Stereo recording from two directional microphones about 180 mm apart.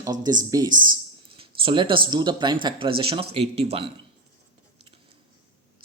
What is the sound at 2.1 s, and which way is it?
Speech, 25° right (ahead or behind).